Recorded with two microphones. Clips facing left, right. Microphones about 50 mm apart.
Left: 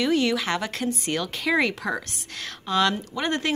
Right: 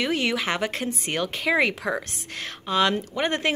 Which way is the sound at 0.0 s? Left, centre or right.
Right.